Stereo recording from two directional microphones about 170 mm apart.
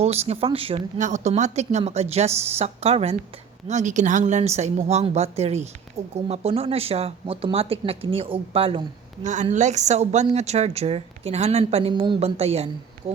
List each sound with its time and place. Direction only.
0.0 s speech: 40° right (ahead or behind)
0.9 s speech: 45° right (ahead or behind)
9.2 s a woman's voice: 45° right (ahead or behind)